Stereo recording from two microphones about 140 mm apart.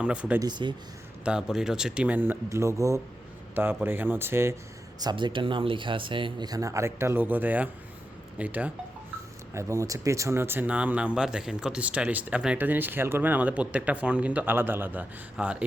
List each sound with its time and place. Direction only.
0.0 s speech: 10° right (ahead or behind)
0.3 s speech: 30° right (ahead or behind)
1.2 s speech: 5° right (ahead or behind)
4.9 s speech: 30° right (ahead or behind); by 8.7 s 10° right (ahead or behind)
9.6 s speech: 20° right (ahead or behind)